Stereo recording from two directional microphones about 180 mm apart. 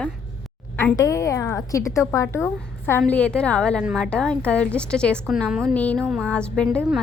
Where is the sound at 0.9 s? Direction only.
20° left (ahead or behind).